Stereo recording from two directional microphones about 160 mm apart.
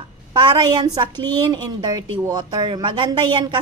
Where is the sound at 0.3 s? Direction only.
30° right (ahead or behind).